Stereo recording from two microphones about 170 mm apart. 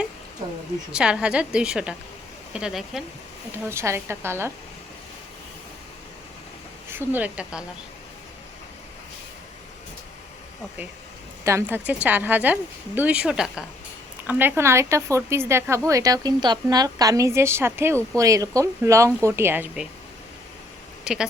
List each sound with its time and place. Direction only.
0.9 s a woman's voice: 5° right (ahead or behind)
3.7 s speech: 15° right (ahead or behind)
6.9 s speech: 10° right (ahead or behind)
11.4 s speech: 15° right (ahead or behind)
21.0 s speech: 5° right (ahead or behind)